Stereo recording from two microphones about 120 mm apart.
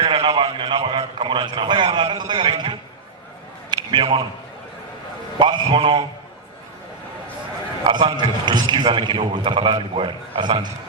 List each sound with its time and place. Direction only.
0.0 s a man's voice: 50° right (ahead or behind)
3.7 s a sound: 45° right (ahead or behind)
5.4 s a man's voice: 40° right (ahead or behind)
7.9 s a man's voice: 40° right (ahead or behind)